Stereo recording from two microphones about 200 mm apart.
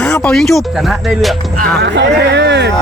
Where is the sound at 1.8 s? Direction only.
60° right (ahead or behind).